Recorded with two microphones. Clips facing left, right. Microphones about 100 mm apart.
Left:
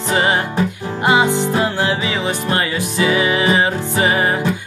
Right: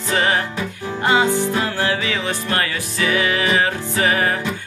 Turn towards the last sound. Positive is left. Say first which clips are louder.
# left 2 dB
turn(degrees=20)  # may be behind; listen again after turning